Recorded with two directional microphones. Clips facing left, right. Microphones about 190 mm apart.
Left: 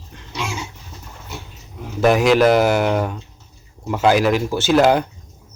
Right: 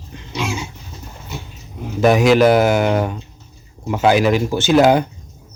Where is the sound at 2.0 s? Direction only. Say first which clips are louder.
Right 2 dB; centre (ahead or behind).